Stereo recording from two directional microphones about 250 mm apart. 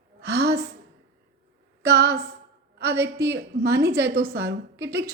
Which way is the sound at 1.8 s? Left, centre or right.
Right.